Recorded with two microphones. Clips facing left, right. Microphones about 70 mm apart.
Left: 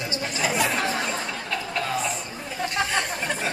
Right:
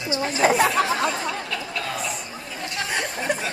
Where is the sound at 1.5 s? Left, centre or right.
Left.